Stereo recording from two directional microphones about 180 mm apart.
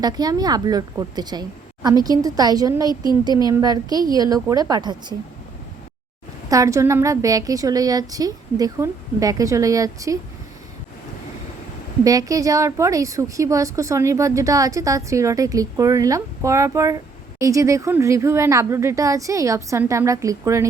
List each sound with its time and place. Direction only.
0.0 s a woman's voice: 20° right (ahead or behind)
6.5 s a woman's voice: 15° right (ahead or behind)
12.0 s a woman's voice: 20° right (ahead or behind)